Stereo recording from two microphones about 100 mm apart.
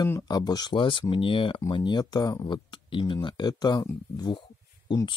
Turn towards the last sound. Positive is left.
turn(degrees=50)  # may be behind; listen again after turning